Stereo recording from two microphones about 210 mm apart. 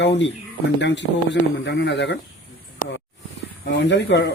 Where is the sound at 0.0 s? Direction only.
55° left (ahead or behind).